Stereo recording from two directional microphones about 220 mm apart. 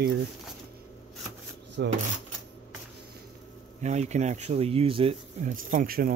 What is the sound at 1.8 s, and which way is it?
Speech, 50° right (ahead or behind).